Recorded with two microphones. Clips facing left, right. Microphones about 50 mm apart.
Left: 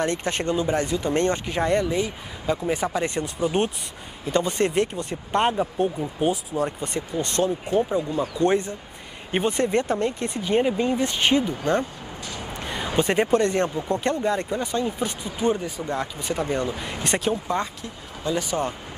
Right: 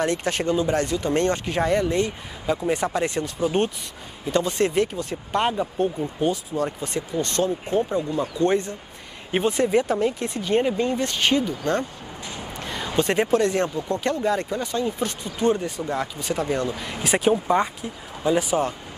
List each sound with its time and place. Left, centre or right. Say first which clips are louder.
0.0 s speech: right 1 dB; centre
5.5 s speech: even; centre
7.2 s speech: even; left
9.3 s speech: right 2 dB; centre
12.4 s a sound: left 1 dB; centre
13.7 s speech: even; centre
14.1 s speech: right 1 dB; centre
17.3 s speech: right 5 dB; centre